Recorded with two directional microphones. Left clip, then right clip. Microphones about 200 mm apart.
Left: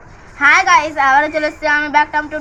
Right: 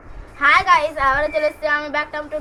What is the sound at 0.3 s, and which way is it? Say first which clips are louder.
A woman's voice: left 4 dB; 20° right (ahead or behind).